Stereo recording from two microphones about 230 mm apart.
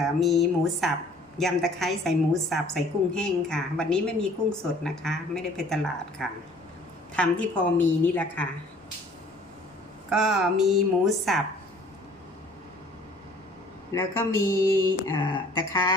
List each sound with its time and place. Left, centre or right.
0.2 s a woman's voice: centre
10.1 s a woman's voice: centre
13.9 s a woman's voice: centre